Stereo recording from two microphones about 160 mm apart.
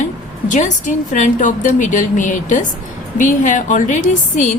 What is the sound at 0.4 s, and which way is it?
A woman's voice, 50° left (ahead or behind).